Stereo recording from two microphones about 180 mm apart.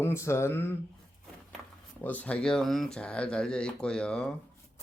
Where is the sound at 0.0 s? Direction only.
15° left (ahead or behind).